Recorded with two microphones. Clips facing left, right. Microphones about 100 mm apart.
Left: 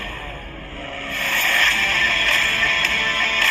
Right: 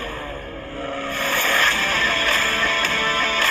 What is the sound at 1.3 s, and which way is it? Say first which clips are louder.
Music: right 1 dB; 30° right (ahead or behind).